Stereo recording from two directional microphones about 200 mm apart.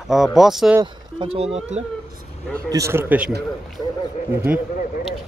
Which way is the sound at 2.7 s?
15° right (ahead or behind).